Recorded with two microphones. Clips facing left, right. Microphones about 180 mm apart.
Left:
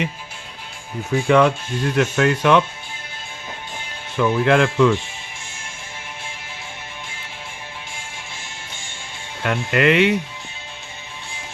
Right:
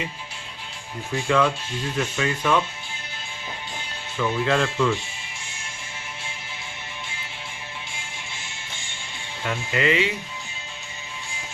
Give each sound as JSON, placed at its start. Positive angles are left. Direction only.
{"t": 1.3, "sound": "speech", "side_deg": 65}
{"t": 4.2, "sound": "speech", "side_deg": 65}
{"t": 9.4, "sound": "speech", "side_deg": 65}